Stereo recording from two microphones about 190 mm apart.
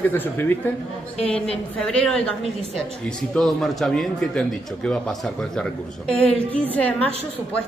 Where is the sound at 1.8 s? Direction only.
5° left (ahead or behind).